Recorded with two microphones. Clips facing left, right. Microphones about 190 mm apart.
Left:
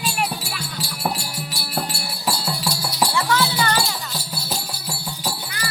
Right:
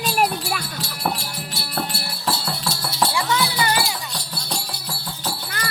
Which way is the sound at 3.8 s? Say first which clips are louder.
Even; 5° left (ahead or behind).